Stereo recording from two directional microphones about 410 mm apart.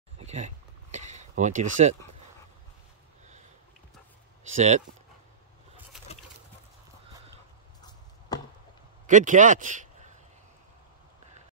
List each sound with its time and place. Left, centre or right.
0.2 s a sound: centre
4.5 s speech: centre
9.0 s a man's voice: centre